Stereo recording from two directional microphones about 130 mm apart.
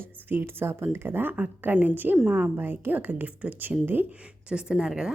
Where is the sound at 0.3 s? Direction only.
15° right (ahead or behind).